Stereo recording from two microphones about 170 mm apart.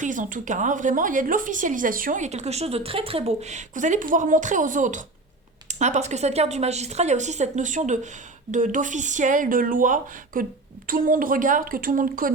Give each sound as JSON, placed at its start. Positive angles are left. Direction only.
{"t": 0.0, "sound": "a woman's voice", "side_deg": -50}